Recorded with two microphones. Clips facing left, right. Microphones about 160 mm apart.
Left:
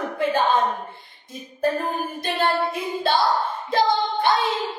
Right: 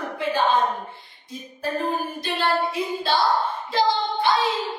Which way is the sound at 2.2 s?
50° left (ahead or behind).